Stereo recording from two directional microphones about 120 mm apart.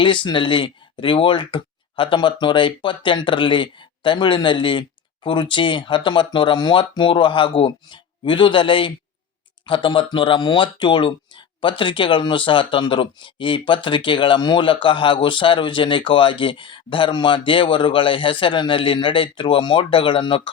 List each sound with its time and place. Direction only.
0.0 s speech: 40° left (ahead or behind)